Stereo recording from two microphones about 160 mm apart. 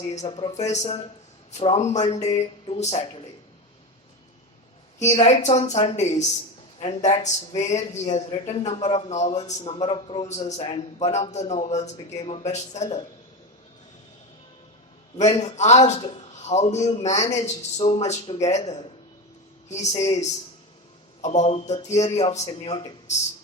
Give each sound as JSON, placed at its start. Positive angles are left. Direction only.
{"t": 0.1, "sound": "a man's voice", "side_deg": 40}
{"t": 4.9, "sound": "a man's voice", "side_deg": 45}
{"t": 15.4, "sound": "a man's voice", "side_deg": 45}